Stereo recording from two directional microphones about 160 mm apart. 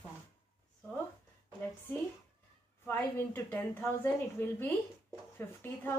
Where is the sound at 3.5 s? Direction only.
15° left (ahead or behind).